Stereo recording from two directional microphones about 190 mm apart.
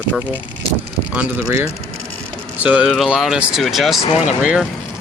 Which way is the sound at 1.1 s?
10° right (ahead or behind).